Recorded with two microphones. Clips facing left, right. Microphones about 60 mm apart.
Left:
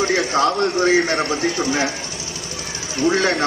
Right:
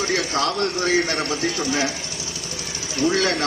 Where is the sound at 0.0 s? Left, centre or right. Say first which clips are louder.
Left 5 dB; left.